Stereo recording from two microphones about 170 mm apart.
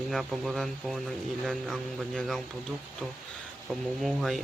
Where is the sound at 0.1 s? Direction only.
Centre (ahead or behind).